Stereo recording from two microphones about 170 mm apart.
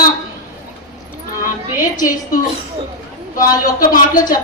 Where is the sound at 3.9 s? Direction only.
55° left (ahead or behind).